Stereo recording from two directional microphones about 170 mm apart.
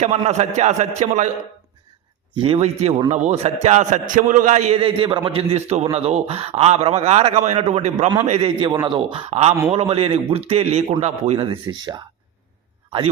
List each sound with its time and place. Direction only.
0.0 s a man's voice: 40° right (ahead or behind)
2.3 s a man's voice: 30° right (ahead or behind)